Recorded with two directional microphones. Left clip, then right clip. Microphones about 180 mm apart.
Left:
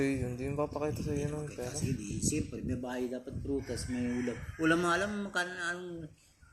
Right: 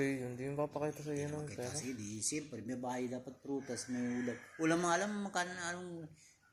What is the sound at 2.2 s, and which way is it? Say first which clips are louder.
Speech: left 6 dB; 5° left (ahead or behind).